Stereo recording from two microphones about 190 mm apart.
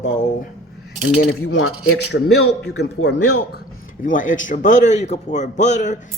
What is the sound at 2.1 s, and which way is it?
A man's voice, 70° left (ahead or behind).